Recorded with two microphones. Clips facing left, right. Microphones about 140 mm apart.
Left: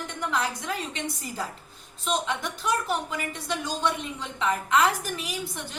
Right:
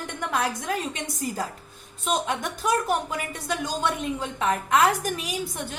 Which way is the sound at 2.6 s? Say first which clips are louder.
Right 4 dB; 45° right (ahead or behind).